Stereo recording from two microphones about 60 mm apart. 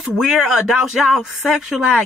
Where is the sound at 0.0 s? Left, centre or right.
Centre.